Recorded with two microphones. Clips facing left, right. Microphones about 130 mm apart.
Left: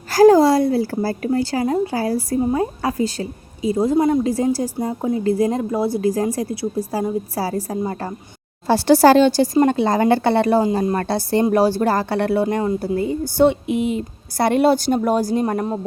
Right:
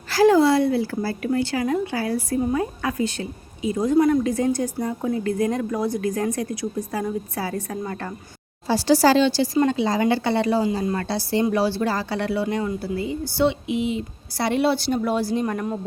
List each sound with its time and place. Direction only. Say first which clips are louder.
0.1 s a woman's voice: left 5 dB; 40° left (ahead or behind)
8.6 s speech: left 5 dB; 55° left (ahead or behind)
10.7 s speech: left 5 dB; 40° left (ahead or behind)